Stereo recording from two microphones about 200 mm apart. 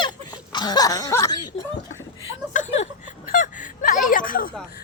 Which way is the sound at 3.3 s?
40° left (ahead or behind).